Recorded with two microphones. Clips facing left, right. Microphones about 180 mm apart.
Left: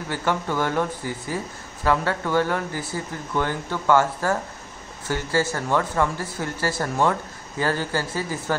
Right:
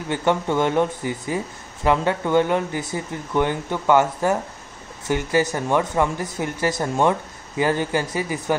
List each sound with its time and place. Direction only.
0.1 s speech: 20° right (ahead or behind)